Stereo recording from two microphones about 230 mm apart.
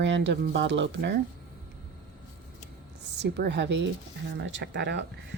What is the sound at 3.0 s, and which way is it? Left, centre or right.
A woman's voice, right.